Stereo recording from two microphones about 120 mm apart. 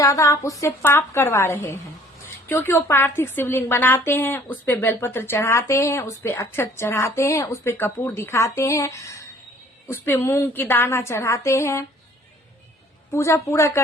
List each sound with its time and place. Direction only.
0.0 s a woman's voice: 25° left (ahead or behind)
13.1 s a woman's voice: 25° left (ahead or behind)